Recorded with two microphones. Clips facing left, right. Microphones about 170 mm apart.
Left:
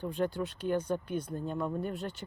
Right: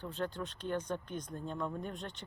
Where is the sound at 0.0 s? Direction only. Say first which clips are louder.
Left 6 dB; 10° left (ahead or behind).